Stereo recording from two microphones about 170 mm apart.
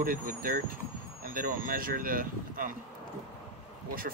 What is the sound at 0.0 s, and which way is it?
Speech, 55° right (ahead or behind).